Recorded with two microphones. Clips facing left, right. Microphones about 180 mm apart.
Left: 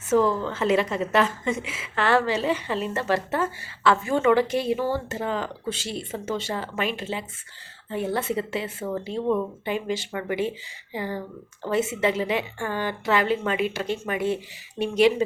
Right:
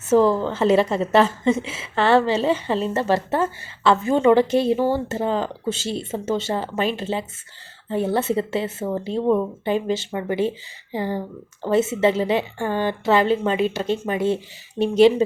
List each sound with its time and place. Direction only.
0.1 s a woman's voice: 30° right (ahead or behind)